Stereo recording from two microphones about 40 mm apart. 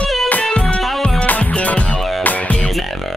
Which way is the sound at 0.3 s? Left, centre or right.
Left.